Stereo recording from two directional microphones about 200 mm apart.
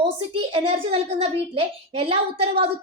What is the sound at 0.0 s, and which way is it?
A child's voice, 30° right (ahead or behind).